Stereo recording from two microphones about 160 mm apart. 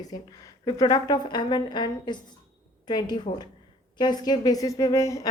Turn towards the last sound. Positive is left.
turn(degrees=20)  # may be behind; listen again after turning